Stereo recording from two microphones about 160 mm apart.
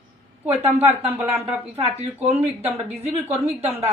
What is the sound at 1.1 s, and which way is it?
Speech, 15° right (ahead or behind).